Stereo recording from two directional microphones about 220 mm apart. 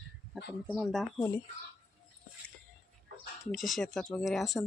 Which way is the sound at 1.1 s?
10° left (ahead or behind).